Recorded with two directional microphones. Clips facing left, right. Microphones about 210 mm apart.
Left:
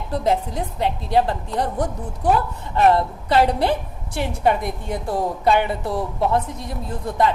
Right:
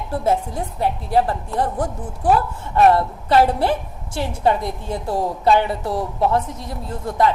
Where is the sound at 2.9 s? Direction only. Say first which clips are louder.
Right 2 dB; 15° left (ahead or behind).